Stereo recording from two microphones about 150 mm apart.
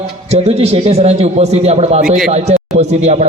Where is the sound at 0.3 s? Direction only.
45° right (ahead or behind).